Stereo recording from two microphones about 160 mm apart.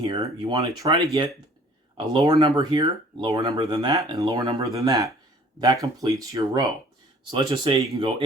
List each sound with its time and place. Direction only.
0.0 s speech: 30° right (ahead or behind)
0.6 s speech: 20° right (ahead or behind)